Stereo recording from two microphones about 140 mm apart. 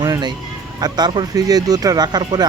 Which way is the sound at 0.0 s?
30° right (ahead or behind).